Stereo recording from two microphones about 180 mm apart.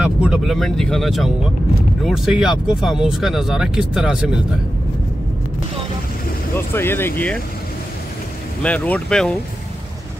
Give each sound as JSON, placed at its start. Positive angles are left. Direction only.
{"t": 0.0, "sound": "speech", "side_deg": -5}
{"t": 6.5, "sound": "speech", "side_deg": 10}
{"t": 8.6, "sound": "speech", "side_deg": 10}